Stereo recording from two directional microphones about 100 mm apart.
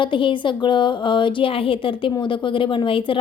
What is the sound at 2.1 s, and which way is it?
Speech, 50° left (ahead or behind).